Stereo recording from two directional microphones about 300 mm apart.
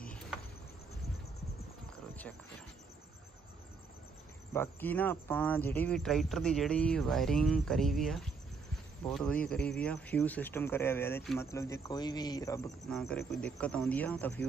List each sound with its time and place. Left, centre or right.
0.0 s cricket: centre
4.6 s speech: centre